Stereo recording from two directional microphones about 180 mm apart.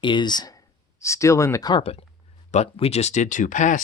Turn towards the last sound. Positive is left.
turn(degrees=45)  # may be behind; listen again after turning